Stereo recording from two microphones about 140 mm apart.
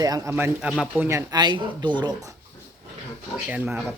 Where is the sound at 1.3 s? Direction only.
30° right (ahead or behind).